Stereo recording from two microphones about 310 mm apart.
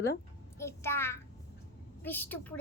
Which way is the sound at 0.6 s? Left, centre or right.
Centre.